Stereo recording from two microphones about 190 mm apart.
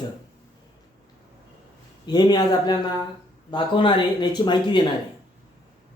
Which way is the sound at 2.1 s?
20° left (ahead or behind).